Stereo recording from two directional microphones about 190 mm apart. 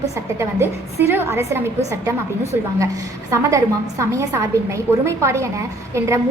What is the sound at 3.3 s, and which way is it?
A woman's voice, 15° right (ahead or behind).